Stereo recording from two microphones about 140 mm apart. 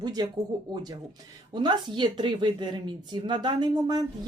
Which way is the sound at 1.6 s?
35° right (ahead or behind).